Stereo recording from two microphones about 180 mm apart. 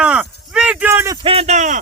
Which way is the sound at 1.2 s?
35° right (ahead or behind).